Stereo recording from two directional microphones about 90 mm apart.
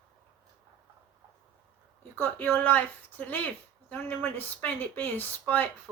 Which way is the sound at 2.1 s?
20° left (ahead or behind).